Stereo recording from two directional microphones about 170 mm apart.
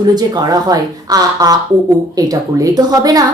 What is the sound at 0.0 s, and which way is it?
Speech, 20° right (ahead or behind).